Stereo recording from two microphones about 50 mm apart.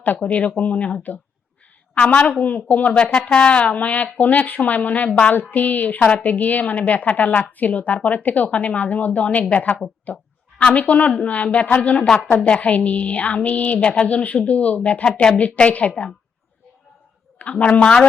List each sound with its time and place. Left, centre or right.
0.0 s a woman's voice: left
2.0 s a woman's voice: left
5.3 s a woman's voice: left
17.3 s a woman's voice: left